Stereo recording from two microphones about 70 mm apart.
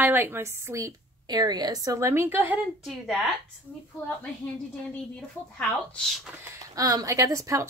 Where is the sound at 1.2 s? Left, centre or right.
Right.